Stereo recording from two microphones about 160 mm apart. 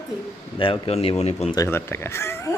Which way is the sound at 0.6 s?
35° left (ahead or behind).